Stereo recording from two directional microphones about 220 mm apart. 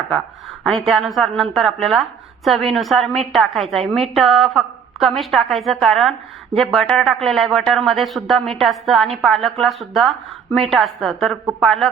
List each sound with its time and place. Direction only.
0.6 s a woman's voice: centre (ahead or behind)